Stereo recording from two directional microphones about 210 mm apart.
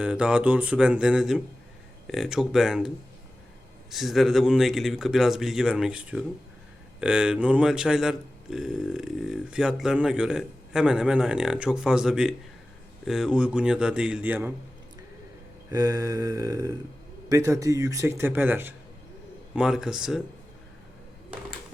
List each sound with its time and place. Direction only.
0.0 s speech: 5° right (ahead or behind)
3.9 s speech: centre (ahead or behind)
15.7 s speech: 15° right (ahead or behind)